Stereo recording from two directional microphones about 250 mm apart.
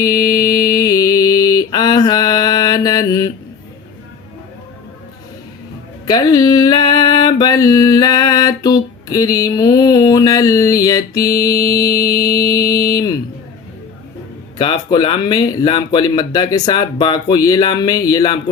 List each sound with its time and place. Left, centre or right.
0.0 s mantra: centre
6.1 s mantra: centre
14.6 s mantra: centre